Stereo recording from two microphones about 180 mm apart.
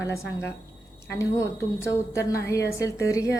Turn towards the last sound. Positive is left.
turn(degrees=15)  # may be behind; listen again after turning